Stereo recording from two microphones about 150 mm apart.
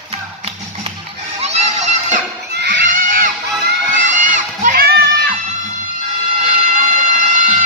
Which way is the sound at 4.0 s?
55° right (ahead or behind).